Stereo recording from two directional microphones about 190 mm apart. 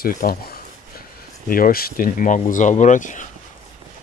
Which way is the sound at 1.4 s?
50° left (ahead or behind).